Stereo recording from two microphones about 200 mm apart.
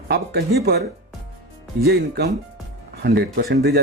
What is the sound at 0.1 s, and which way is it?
Speech, 55° right (ahead or behind).